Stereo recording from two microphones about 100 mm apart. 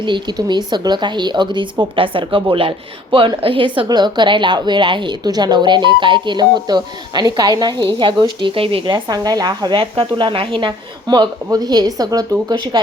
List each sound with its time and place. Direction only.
0.0 s a woman's voice: 50° right (ahead or behind)
3.8 s a woman's voice: 45° right (ahead or behind); by 9.0 s 65° right (ahead or behind)
9.0 s a woman's voice: 40° right (ahead or behind); by 10.7 s 65° right (ahead or behind)
11.4 s a woman's voice: 40° right (ahead or behind)